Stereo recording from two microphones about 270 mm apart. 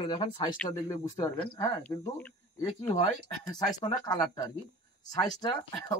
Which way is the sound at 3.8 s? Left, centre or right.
Centre.